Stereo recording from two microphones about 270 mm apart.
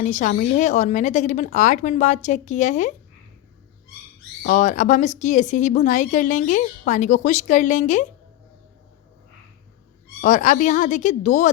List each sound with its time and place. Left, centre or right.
0.0 s speech: left
4.4 s speech: left
10.2 s speech: left